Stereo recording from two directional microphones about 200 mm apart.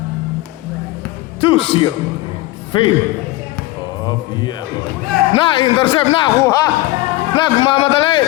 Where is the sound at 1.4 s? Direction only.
25° left (ahead or behind).